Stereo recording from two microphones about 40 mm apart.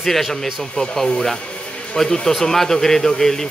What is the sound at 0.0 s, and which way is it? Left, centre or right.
Speech, centre.